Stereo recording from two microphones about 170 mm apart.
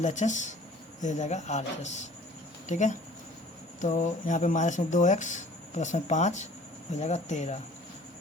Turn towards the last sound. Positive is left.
turn(degrees=45)  # may be behind; listen again after turning